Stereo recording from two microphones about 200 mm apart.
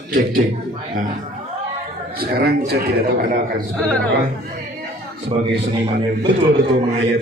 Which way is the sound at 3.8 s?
5° left (ahead or behind).